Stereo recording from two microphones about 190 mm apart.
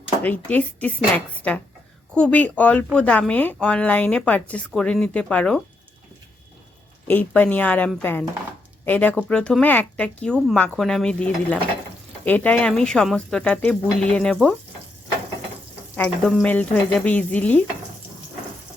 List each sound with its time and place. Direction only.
0.2 s a woman's voice: 10° left (ahead or behind)
7.1 s a woman's voice: 10° left (ahead or behind)
16.0 s a woman's voice: 5° left (ahead or behind)